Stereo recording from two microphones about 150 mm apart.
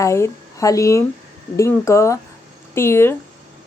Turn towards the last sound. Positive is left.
turn(degrees=15)  # may be behind; listen again after turning